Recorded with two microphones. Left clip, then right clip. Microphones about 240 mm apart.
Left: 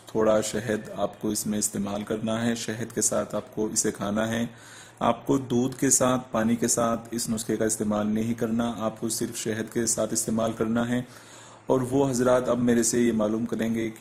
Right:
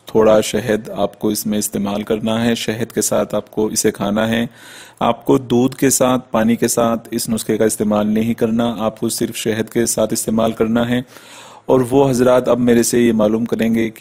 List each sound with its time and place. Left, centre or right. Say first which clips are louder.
0.1 s speech: right 11 dB; right